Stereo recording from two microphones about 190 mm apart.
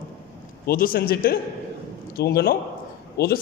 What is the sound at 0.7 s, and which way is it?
A man's voice, 50° left (ahead or behind).